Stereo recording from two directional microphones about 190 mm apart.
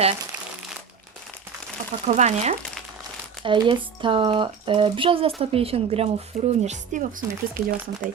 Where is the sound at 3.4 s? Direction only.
25° right (ahead or behind); by 7.7 s 45° right (ahead or behind).